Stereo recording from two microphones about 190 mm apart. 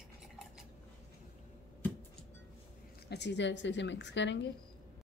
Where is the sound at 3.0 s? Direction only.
60° left (ahead or behind).